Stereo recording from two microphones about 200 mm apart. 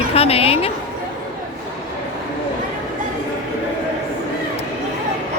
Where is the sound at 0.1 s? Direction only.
30° left (ahead or behind).